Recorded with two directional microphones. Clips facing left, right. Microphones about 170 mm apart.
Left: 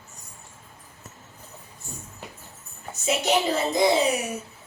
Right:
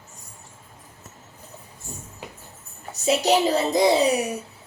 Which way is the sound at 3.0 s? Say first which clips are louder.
Right 4 dB; 35° right (ahead or behind).